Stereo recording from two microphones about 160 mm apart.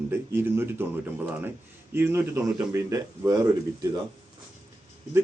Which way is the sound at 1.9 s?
15° right (ahead or behind).